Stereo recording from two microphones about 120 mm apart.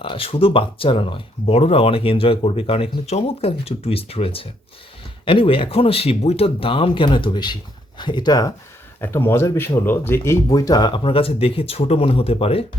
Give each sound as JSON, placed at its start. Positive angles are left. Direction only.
{"t": 0.0, "sound": "speech", "side_deg": 50}
{"t": 9.0, "sound": "speech", "side_deg": 20}